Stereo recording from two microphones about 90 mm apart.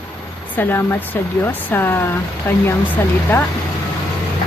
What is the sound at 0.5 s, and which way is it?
Speech, 20° left (ahead or behind).